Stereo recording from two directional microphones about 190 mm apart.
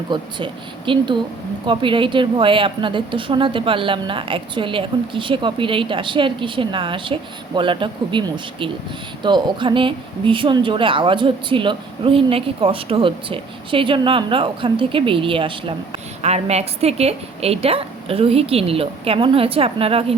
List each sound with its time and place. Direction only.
0.1 s speech: 25° right (ahead or behind)